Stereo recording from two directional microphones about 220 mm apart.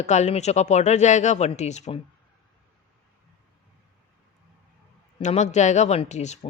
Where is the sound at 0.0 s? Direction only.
30° left (ahead or behind).